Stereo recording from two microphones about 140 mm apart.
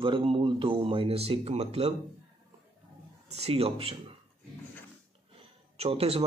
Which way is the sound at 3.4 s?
45° right (ahead or behind).